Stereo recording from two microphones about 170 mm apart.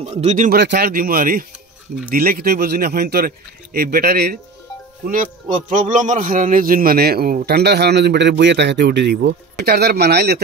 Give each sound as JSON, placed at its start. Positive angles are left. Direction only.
{"t": 0.0, "sound": "speech", "side_deg": -40}
{"t": 0.5, "sound": "speech", "side_deg": -70}
{"t": 5.0, "sound": "a man's voice", "side_deg": -50}